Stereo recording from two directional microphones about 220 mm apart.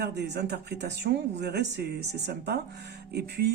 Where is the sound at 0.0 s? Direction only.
50° right (ahead or behind).